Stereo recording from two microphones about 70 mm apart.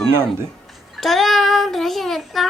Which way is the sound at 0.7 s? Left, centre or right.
Centre.